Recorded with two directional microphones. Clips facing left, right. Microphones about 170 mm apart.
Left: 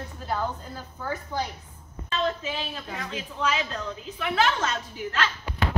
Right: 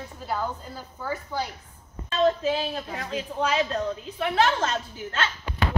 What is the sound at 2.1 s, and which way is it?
A woman's voice, 40° right (ahead or behind).